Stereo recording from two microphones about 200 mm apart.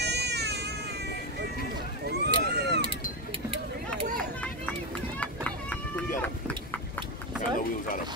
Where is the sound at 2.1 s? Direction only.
55° right (ahead or behind).